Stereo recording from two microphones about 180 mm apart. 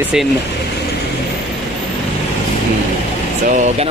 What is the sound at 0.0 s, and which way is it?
Speech, 5° right (ahead or behind).